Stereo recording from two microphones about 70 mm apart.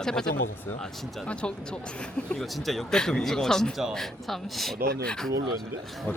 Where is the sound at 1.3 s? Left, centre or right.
Centre.